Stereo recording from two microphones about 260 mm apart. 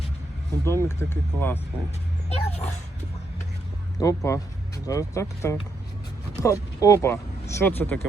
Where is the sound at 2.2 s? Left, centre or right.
Left.